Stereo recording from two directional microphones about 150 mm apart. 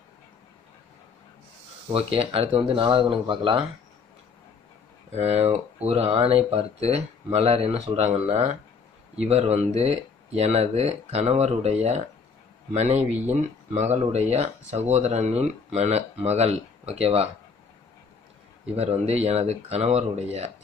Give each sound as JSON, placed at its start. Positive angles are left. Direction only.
{"t": 1.9, "sound": "speech", "side_deg": -40}
{"t": 5.1, "sound": "speech", "side_deg": -45}
{"t": 18.8, "sound": "speech", "side_deg": -45}